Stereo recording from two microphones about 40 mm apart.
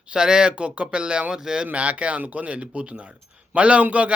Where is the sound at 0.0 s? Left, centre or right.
Right.